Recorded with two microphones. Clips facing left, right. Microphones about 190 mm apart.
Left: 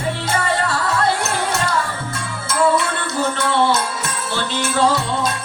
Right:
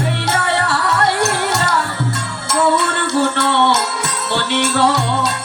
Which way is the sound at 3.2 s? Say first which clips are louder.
Right 1 dB; 70° right (ahead or behind).